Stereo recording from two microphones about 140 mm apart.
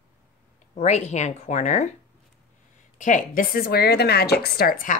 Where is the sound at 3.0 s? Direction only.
65° left (ahead or behind); by 4.9 s 85° left.